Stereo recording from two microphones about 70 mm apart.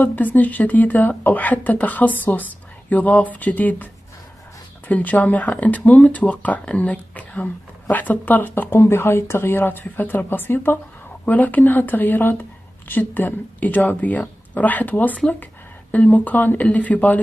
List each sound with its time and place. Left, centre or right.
0.0 s speech: left